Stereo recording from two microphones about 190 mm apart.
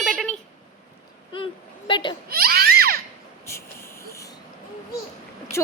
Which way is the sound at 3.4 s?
15° left (ahead or behind).